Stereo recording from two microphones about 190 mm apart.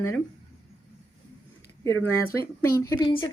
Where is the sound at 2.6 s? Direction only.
15° left (ahead or behind).